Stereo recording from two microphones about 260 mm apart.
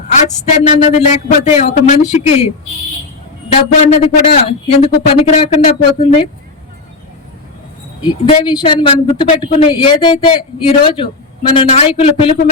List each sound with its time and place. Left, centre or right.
0.6 s a sound: centre
0.9 s speech: left
2.0 s speech: centre
3.8 s speech: left
8.0 s speech: centre